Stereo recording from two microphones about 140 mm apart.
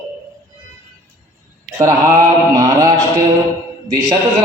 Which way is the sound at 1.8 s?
20° right (ahead or behind).